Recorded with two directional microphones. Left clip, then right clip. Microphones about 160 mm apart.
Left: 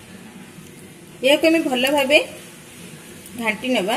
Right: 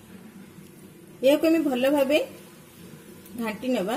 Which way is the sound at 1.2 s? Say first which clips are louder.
Left 4 dB; 45° right (ahead or behind).